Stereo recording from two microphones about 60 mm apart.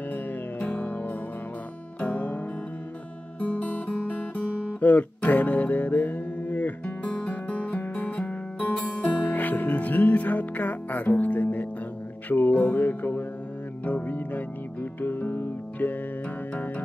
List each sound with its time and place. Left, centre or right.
0.7 s music: left
7.1 s music: centre
7.4 s music: left
9.2 s music: left